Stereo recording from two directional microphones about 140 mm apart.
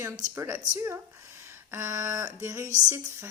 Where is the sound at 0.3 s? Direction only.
20° right (ahead or behind).